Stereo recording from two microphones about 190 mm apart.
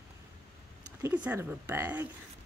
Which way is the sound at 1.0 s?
10° right (ahead or behind).